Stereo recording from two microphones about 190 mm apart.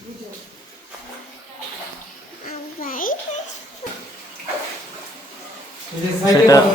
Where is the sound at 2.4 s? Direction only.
50° left (ahead or behind).